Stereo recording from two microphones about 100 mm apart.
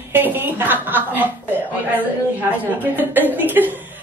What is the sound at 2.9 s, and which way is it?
Speech, 20° right (ahead or behind).